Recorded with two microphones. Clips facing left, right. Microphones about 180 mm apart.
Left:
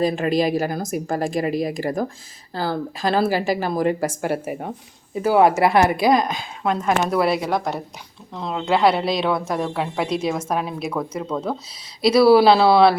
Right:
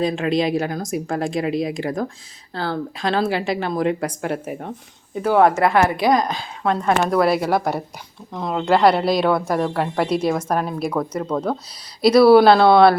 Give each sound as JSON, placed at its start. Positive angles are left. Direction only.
{"t": 0.0, "sound": "a woman's voice", "side_deg": 5}
{"t": 7.2, "sound": "speech", "side_deg": 0}